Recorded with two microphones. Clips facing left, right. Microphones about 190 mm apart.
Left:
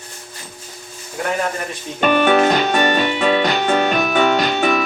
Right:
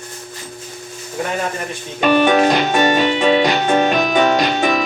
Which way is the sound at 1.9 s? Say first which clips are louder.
Right 1 dB; 10° right (ahead or behind).